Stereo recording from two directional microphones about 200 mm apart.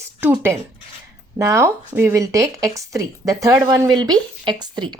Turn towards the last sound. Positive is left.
turn(degrees=-20)  # may be behind; listen again after turning